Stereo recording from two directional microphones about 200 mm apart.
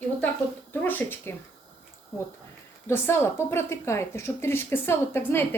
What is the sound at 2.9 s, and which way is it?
Speech, 10° left (ahead or behind).